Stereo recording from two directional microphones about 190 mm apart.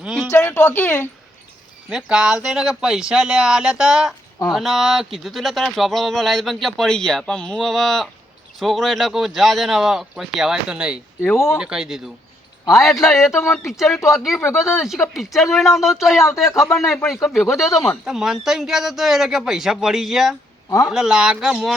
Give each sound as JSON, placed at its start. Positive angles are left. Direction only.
{"t": 0.0, "sound": "a sound", "side_deg": -5}
{"t": 0.3, "sound": "speech", "side_deg": 15}
{"t": 1.9, "sound": "speech", "side_deg": -5}
{"t": 11.2, "sound": "speech", "side_deg": 10}
{"t": 11.5, "sound": "speech", "side_deg": -5}
{"t": 20.7, "sound": "speech", "side_deg": 15}
{"t": 20.9, "sound": "speech", "side_deg": -5}